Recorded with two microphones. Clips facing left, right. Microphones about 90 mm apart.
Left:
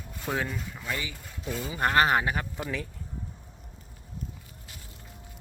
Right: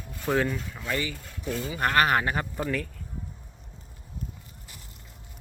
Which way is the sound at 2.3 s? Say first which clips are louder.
Right 2 dB; centre (ahead or behind).